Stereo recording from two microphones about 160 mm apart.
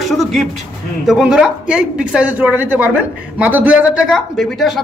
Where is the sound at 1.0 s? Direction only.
5° right (ahead or behind).